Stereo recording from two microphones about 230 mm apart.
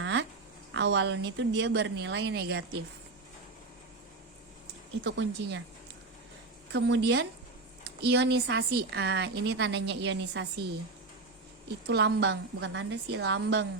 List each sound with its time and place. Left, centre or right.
0.0 s a sound: right
0.7 s speech: right
5.0 s speech: right
6.7 s speech: right
11.9 s speech: right